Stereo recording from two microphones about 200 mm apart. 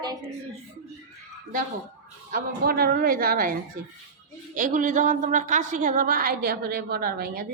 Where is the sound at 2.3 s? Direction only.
50° right (ahead or behind).